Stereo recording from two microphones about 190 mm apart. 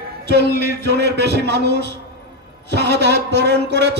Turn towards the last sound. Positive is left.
turn(degrees=-60)  # may be behind; listen again after turning